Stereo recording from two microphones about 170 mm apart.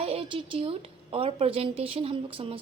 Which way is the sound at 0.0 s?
35° right (ahead or behind).